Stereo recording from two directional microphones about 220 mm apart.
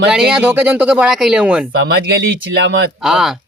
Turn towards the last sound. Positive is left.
turn(degrees=0)  # may be behind; listen again after turning